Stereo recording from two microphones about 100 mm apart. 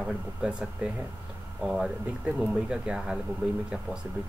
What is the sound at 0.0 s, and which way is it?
Speech, 10° right (ahead or behind).